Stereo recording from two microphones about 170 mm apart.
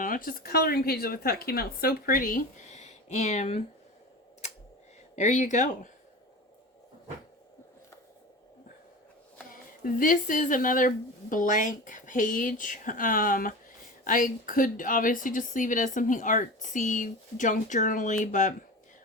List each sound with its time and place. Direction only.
0.0 s speech: 55° left (ahead or behind)
5.1 s a woman's voice: 45° left (ahead or behind)
9.8 s a woman's voice: 55° left (ahead or behind)